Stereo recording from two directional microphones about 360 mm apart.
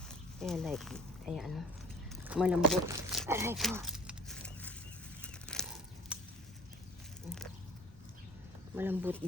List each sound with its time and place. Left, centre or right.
0.1 s speech: centre
2.0 s a sound: centre
5.2 s bird flight: centre
8.7 s speech: centre